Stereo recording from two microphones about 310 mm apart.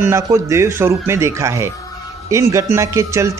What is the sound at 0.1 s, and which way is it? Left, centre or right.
Speech, centre.